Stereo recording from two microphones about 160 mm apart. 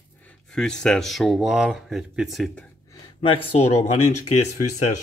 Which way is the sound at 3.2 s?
35° left (ahead or behind).